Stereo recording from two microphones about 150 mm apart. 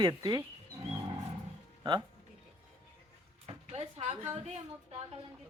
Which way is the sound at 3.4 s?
45° right (ahead or behind).